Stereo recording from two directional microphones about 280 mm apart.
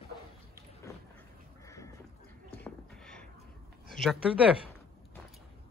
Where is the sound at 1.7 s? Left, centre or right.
Centre.